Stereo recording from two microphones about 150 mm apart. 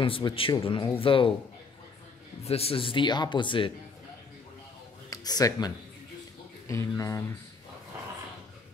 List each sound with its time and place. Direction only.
0.0 s speech: 35° left (ahead or behind)
2.4 s speech: 40° left (ahead or behind)
5.1 s speech: 25° left (ahead or behind)
6.7 s speech: 20° left (ahead or behind)